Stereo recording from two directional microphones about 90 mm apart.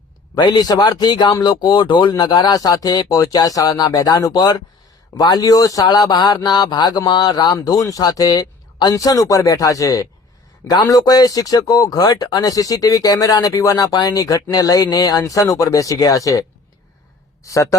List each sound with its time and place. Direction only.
0.3 s speech: 55° left (ahead or behind); by 17.7 s 35° left (ahead or behind)